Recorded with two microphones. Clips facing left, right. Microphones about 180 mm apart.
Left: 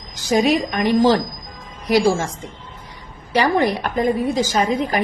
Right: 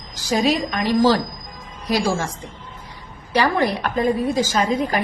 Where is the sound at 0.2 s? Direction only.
20° left (ahead or behind).